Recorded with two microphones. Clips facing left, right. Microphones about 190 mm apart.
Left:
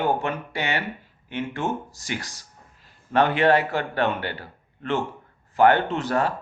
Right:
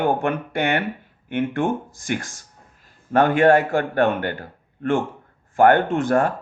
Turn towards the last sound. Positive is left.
turn(degrees=-50)  # may be behind; listen again after turning